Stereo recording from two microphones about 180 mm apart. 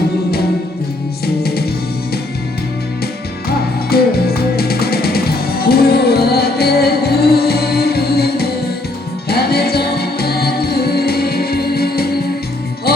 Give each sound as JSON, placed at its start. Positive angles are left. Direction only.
{"t": 1.4, "sound": "music", "side_deg": 60}
{"t": 3.8, "sound": "music", "side_deg": 60}